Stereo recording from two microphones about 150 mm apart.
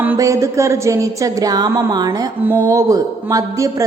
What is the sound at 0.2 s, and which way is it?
A woman's voice, 20° right (ahead or behind).